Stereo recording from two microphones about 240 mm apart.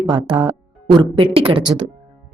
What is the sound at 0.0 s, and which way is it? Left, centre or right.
Speech, centre.